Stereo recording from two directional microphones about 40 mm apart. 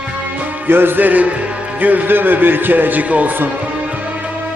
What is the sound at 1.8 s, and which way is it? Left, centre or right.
Speech, right.